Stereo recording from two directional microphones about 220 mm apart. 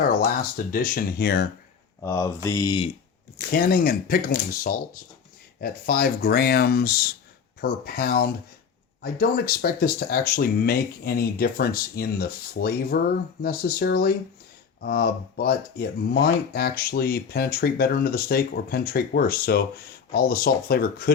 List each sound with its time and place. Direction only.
0.2 s speech: 40° left (ahead or behind)
2.0 s speech: 15° left (ahead or behind)
3.6 s speech: 40° left (ahead or behind)